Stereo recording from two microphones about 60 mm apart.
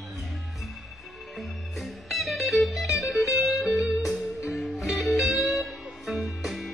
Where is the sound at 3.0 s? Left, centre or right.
Left.